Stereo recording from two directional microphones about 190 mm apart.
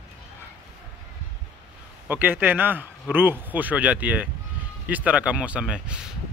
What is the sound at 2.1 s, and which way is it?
A man's voice, 10° right (ahead or behind).